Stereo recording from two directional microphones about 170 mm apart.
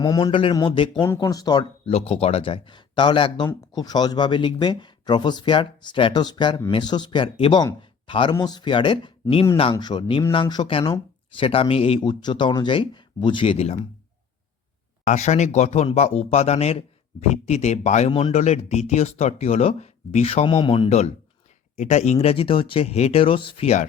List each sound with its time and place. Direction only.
0.0 s speech: 25° left (ahead or behind)
1.0 s speech: 15° left (ahead or behind)
1.9 s speech: 35° left (ahead or behind)
15.0 s speech: 40° left (ahead or behind)